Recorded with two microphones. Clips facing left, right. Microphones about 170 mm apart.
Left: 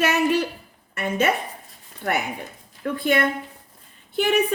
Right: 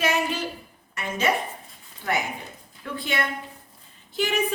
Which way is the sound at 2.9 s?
50° left (ahead or behind).